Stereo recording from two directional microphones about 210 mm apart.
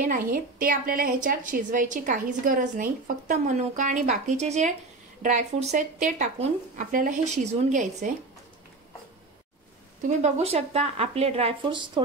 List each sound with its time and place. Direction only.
0.0 s a woman's voice: 40° right (ahead or behind)
10.0 s speech: 35° right (ahead or behind)